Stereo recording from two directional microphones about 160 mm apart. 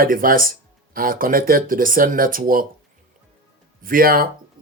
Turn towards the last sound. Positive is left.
turn(degrees=-65)  # may be behind; listen again after turning